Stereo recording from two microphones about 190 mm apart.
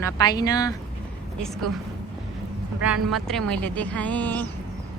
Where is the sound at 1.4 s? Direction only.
Centre (ahead or behind).